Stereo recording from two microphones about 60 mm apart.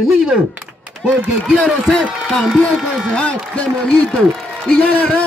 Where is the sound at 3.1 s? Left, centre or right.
Centre.